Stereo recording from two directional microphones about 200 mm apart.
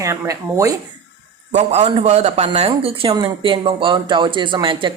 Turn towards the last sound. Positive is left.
turn(degrees=-25)  # may be behind; listen again after turning